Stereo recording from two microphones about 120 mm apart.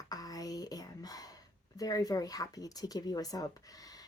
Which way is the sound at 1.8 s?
30° left (ahead or behind).